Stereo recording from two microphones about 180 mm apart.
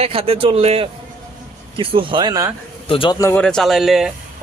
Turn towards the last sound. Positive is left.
turn(degrees=0)  # may be behind; listen again after turning